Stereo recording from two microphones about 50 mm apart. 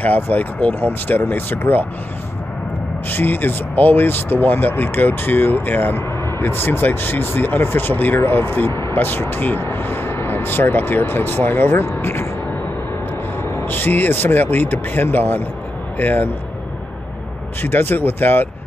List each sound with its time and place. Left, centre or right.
0.0 s speech: left
3.1 s speech: left
13.7 s speech: left
17.6 s speech: left